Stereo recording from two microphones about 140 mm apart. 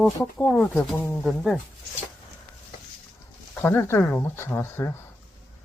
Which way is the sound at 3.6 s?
15° left (ahead or behind).